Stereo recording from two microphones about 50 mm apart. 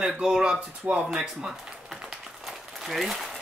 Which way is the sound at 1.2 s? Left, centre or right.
Centre.